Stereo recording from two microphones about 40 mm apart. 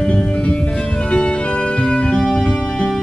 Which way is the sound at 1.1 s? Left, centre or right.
Left.